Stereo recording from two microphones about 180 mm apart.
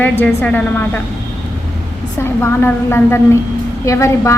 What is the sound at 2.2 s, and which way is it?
Speech, 15° left (ahead or behind).